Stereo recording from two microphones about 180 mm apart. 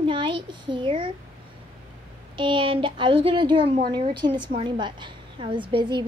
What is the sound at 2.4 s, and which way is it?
A woman's voice, 25° right (ahead or behind).